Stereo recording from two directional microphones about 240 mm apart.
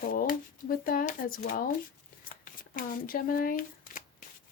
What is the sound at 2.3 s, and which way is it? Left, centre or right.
Shuffling cards, left.